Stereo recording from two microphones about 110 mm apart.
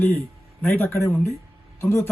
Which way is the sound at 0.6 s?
15° left (ahead or behind).